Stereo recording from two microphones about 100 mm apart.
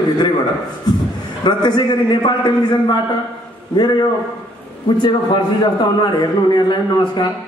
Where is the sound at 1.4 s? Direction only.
50° left (ahead or behind).